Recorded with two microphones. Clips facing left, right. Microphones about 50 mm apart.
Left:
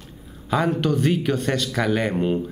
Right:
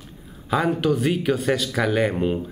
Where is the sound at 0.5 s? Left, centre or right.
Centre.